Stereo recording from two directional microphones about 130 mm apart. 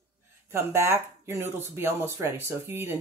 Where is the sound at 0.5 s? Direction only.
20° right (ahead or behind).